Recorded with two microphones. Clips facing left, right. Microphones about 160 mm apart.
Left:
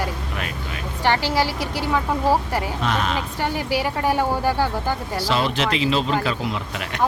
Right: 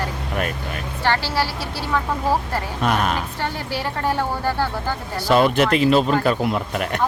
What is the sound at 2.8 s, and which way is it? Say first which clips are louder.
Speech: right 6 dB; 50° right (ahead or behind).